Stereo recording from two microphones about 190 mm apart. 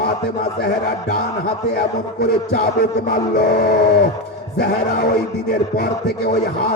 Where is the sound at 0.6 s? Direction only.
60° left (ahead or behind).